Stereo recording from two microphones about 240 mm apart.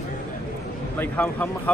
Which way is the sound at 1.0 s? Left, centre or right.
Centre.